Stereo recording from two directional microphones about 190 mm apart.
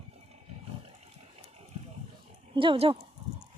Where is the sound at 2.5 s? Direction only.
25° right (ahead or behind).